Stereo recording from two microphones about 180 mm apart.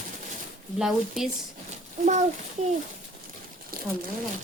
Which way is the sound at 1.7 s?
40° right (ahead or behind).